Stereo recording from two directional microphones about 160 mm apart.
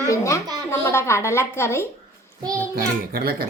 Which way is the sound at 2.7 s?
70° right (ahead or behind).